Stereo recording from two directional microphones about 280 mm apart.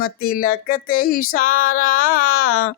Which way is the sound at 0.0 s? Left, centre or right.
Left.